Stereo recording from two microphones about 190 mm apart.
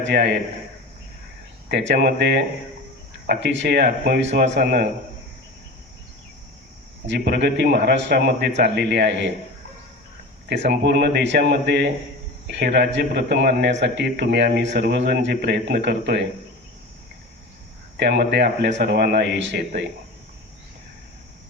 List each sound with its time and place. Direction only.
0.0 s a man's voice: 65° right (ahead or behind)
1.7 s a man's voice: 65° right (ahead or behind)
7.1 s a man's voice: 65° right (ahead or behind)
10.5 s a man's voice: 65° right (ahead or behind)
17.9 s a man's voice: 65° right (ahead or behind)